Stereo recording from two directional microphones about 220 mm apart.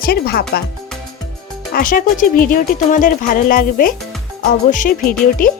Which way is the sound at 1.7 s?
40° left (ahead or behind).